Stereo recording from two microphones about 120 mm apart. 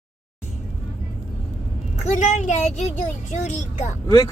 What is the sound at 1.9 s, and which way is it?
Speech, 75° left (ahead or behind).